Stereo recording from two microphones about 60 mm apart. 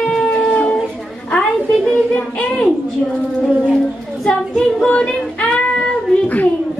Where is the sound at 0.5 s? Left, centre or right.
Centre.